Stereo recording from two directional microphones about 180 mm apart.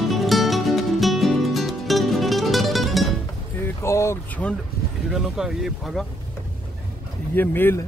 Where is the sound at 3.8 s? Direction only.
15° left (ahead or behind).